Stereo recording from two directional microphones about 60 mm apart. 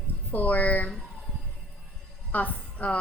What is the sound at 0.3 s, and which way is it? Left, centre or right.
Speech, left.